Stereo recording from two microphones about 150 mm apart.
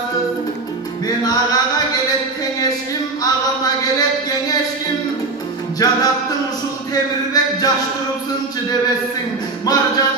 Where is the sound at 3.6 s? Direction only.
25° left (ahead or behind).